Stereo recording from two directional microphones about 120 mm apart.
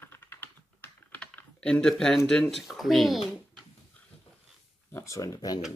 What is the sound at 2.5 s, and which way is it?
Speech, centre (ahead or behind).